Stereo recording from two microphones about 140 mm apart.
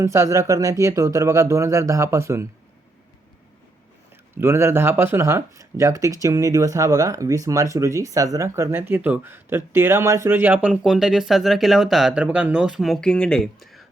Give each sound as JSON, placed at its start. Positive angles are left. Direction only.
{"t": 0.0, "sound": "speech", "side_deg": -20}
{"t": 4.4, "sound": "speech", "side_deg": -15}